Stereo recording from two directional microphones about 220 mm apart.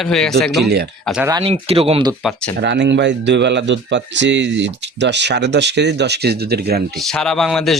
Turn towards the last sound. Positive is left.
turn(degrees=0)  # may be behind; listen again after turning